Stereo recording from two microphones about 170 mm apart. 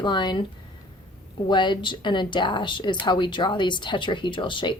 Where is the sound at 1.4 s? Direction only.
25° left (ahead or behind).